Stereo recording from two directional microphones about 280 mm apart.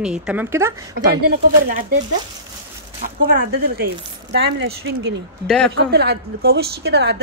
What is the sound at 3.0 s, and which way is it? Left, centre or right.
Speech, right.